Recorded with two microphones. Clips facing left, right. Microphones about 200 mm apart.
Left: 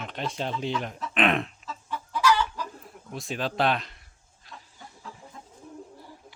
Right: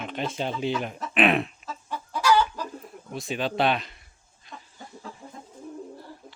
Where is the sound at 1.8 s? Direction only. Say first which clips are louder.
Right 1 dB; 45° right (ahead or behind).